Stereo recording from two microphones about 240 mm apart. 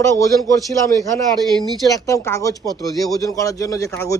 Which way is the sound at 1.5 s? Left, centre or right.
Centre.